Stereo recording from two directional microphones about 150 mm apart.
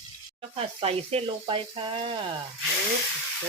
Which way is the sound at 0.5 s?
40° right (ahead or behind).